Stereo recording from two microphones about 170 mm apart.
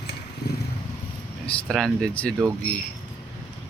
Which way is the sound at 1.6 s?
5° left (ahead or behind).